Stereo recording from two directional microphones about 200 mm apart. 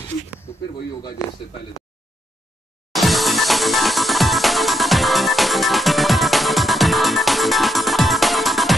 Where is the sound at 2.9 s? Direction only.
Centre (ahead or behind).